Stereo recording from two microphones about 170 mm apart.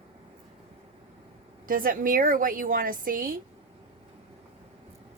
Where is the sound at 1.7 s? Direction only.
55° right (ahead or behind).